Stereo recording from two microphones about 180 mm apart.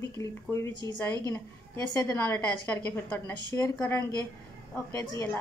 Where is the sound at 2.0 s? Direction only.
15° left (ahead or behind).